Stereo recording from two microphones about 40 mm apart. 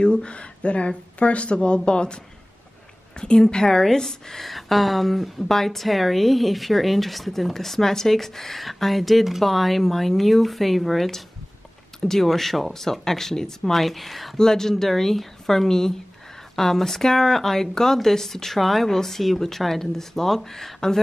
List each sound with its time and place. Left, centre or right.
0.0 s speech: left
3.2 s speech: centre